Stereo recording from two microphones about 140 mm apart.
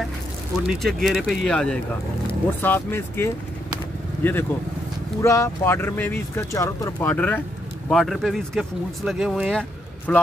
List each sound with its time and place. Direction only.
0.7 s speech: centre (ahead or behind)
7.9 s speech: centre (ahead or behind)